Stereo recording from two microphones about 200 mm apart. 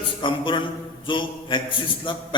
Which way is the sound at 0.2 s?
25° left (ahead or behind).